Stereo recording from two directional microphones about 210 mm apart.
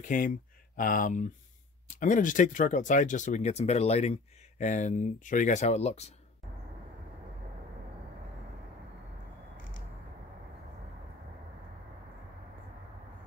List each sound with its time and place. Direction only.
0.0 s speech: 40° left (ahead or behind)